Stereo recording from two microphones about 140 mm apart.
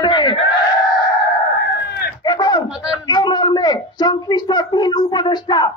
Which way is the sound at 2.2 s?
30° left (ahead or behind).